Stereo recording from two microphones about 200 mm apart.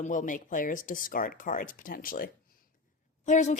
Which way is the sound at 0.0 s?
40° left (ahead or behind).